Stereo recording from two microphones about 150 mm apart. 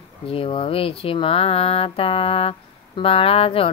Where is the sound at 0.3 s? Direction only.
35° left (ahead or behind).